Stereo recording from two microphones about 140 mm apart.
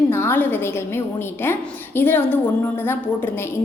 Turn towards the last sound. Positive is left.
turn(degrees=15)  # may be behind; listen again after turning